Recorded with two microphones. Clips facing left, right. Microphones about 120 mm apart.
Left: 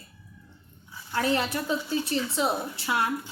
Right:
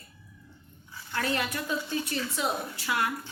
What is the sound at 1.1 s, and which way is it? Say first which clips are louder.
A woman's voice: left 4 dB; 25° left (ahead or behind).